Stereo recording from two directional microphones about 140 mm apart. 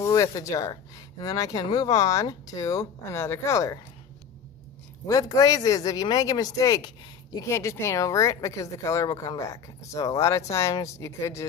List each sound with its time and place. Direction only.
0.0 s speech: 25° left (ahead or behind)
5.0 s speech: 25° left (ahead or behind)